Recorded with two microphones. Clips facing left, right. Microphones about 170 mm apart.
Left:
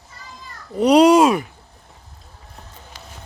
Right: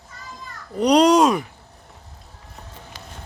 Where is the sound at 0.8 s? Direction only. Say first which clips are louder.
Left 3 dB; 5° left (ahead or behind).